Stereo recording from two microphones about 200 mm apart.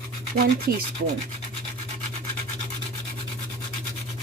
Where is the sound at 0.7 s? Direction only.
50° right (ahead or behind).